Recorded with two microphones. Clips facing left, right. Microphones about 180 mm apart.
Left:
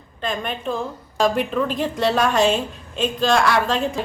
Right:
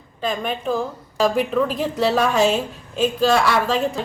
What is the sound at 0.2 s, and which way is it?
A woman's voice, 5° right (ahead or behind).